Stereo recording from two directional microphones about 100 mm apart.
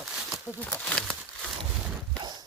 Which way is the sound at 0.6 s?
10° left (ahead or behind).